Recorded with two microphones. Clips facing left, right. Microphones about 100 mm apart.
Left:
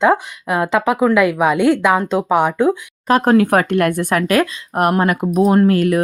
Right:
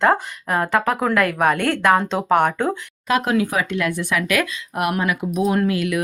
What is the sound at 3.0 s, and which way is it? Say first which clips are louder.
Speech: left 6 dB; 40° left (ahead or behind).